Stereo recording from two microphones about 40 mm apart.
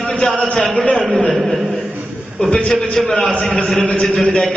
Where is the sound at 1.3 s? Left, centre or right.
Centre.